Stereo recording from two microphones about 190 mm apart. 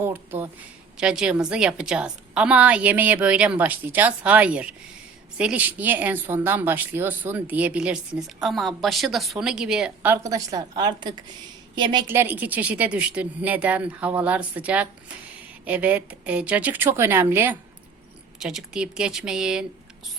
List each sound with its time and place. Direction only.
0.0 s a sound: 10° right (ahead or behind)
0.9 s a woman's voice: 5° right (ahead or behind); by 12.0 s 25° right (ahead or behind)
12.0 s a woman's voice: 10° right (ahead or behind)